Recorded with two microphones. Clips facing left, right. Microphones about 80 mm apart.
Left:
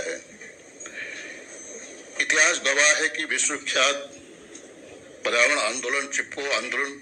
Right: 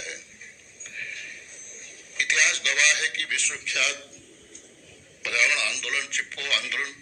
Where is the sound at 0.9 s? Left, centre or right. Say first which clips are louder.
Left 2 dB; left.